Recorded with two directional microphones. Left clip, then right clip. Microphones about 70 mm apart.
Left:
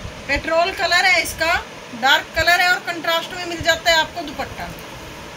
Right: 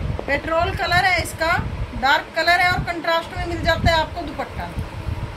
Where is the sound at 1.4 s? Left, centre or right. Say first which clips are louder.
Left 1 dB; right.